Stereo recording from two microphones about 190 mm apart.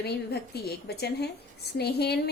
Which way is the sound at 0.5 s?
60° left (ahead or behind).